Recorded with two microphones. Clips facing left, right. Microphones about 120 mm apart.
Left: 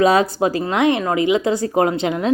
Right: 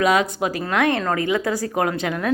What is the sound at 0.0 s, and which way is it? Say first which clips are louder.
Speech: left 4 dB; 35° left (ahead or behind).